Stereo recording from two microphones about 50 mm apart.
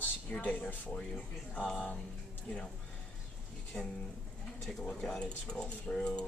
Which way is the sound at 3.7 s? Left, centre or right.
Centre.